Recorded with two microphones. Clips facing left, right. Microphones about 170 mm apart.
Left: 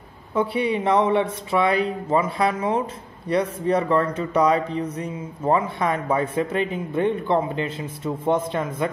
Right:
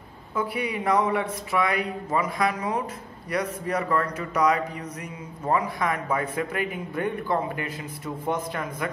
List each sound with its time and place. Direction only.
0.3 s a man's voice: 30° left (ahead or behind)